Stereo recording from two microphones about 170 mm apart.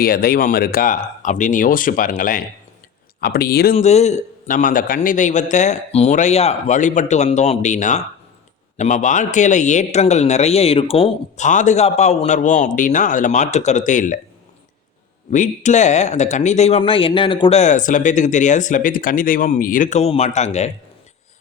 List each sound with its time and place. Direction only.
0.0 s speech: 60° left (ahead or behind)
3.8 s speech: 40° left (ahead or behind)
15.3 s speech: 45° left (ahead or behind); by 17.6 s 30° left (ahead or behind)
17.6 s speech: 45° left (ahead or behind)